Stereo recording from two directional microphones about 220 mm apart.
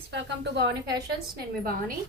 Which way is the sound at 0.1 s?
50° right (ahead or behind).